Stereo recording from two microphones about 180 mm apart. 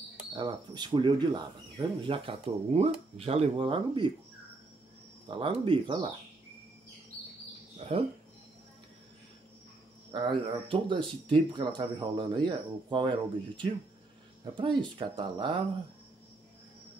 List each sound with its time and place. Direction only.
0.3 s speech: 25° right (ahead or behind)
5.3 s speech: 30° right (ahead or behind)
7.8 s speech: 30° right (ahead or behind)
10.1 s speech: 25° right (ahead or behind)
14.4 s speech: 25° right (ahead or behind)